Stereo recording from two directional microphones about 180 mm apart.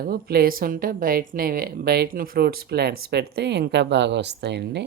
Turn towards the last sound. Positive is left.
turn(degrees=-70)  # may be behind; listen again after turning